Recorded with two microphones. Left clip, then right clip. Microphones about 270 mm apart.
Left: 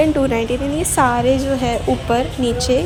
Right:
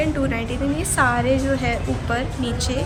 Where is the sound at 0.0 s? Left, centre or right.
Left.